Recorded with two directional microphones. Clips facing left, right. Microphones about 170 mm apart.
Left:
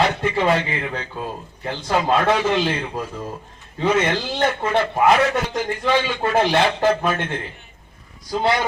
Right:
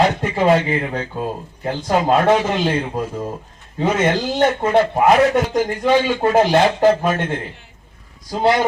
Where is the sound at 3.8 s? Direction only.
40° right (ahead or behind).